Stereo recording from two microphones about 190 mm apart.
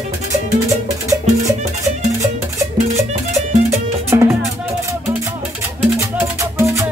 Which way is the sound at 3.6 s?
15° right (ahead or behind).